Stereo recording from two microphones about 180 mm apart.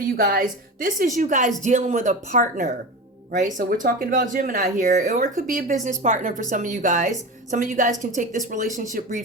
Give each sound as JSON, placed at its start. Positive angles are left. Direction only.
{"t": 0.2, "sound": "speech", "side_deg": -50}